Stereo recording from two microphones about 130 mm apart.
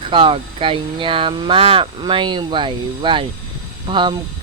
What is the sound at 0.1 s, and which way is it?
Speech, 40° right (ahead or behind).